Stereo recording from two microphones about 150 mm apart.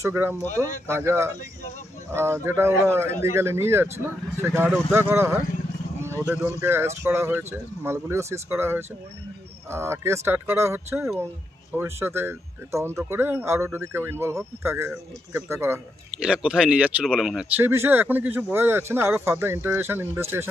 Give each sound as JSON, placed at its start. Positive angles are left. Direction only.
{"t": 0.0, "sound": "speech", "side_deg": -15}
{"t": 4.6, "sound": "speech", "side_deg": 0}
{"t": 4.9, "sound": "speech", "side_deg": -15}
{"t": 16.2, "sound": "speech", "side_deg": -5}
{"t": 17.6, "sound": "speech", "side_deg": -15}